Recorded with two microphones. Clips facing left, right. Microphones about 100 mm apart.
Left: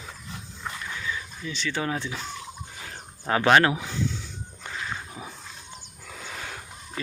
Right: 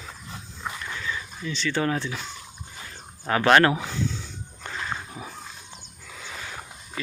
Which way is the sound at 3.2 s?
15° left (ahead or behind).